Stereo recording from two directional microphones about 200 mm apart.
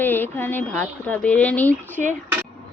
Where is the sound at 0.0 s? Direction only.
10° left (ahead or behind).